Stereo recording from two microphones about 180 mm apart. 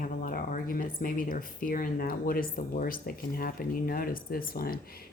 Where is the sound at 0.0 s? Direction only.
50° left (ahead or behind).